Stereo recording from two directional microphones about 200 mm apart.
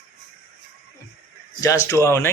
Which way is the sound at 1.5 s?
15° left (ahead or behind).